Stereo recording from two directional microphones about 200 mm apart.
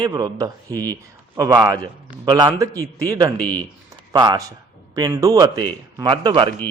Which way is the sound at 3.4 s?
5° left (ahead or behind).